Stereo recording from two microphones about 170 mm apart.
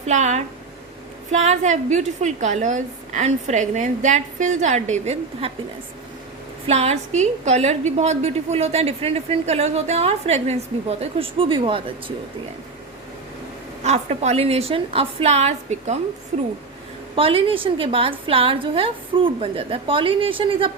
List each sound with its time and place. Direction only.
0.1 s a woman's voice: 45° right (ahead or behind)
6.7 s a woman's voice: 40° right (ahead or behind)
13.8 s a woman's voice: 40° right (ahead or behind)